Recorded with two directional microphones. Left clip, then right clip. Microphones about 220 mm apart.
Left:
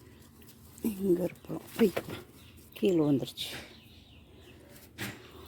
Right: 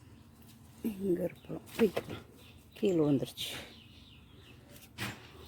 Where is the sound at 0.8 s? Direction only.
20° left (ahead or behind); by 3.7 s centre (ahead or behind).